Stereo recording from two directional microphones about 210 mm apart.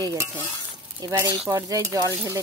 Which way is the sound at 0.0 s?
15° right (ahead or behind).